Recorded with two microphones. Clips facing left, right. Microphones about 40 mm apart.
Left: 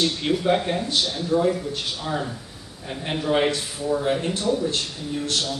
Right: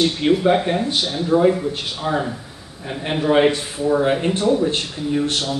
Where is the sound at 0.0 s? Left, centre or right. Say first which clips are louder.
Right 6 dB; centre.